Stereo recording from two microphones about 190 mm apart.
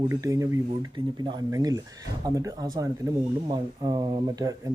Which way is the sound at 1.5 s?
20° right (ahead or behind).